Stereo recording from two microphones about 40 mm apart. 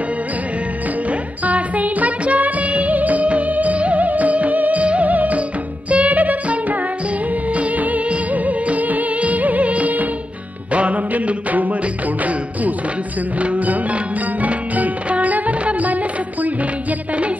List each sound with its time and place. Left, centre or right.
1.4 s music of bollywood: right
5.9 s music: right